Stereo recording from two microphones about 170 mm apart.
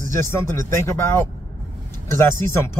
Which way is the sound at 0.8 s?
15° left (ahead or behind).